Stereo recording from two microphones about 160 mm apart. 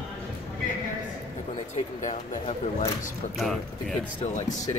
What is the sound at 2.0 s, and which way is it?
Speech, 45° left (ahead or behind).